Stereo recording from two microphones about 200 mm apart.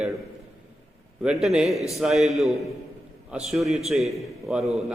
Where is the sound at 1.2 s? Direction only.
Centre (ahead or behind).